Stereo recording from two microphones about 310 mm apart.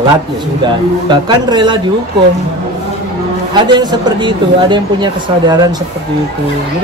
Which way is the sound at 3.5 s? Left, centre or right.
Centre.